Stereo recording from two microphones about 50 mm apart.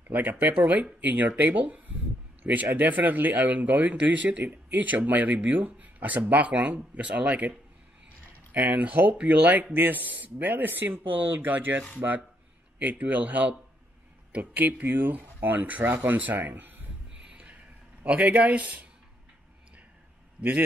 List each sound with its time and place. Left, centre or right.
0.1 s speech: right
8.5 s speech: right
9.0 s speech: right
9.3 s speech: right
17.3 s a sound: right
18.0 s speech: right